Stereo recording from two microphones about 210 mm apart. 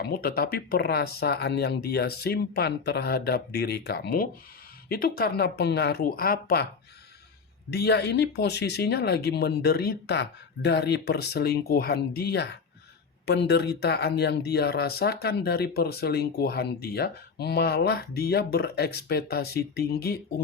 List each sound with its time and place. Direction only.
0.0 s speech: 45° left (ahead or behind)
7.7 s speech: 50° left (ahead or behind)